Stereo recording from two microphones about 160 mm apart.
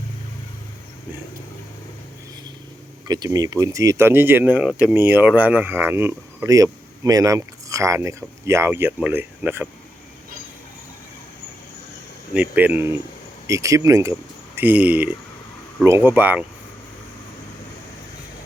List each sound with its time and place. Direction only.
3.1 s speech: 25° right (ahead or behind)
12.3 s speech: 10° right (ahead or behind)